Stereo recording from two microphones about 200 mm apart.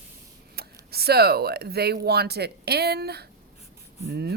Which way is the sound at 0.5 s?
50° right (ahead or behind).